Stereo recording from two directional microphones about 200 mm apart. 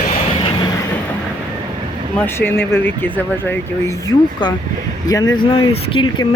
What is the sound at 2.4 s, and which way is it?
Speech, 10° left (ahead or behind).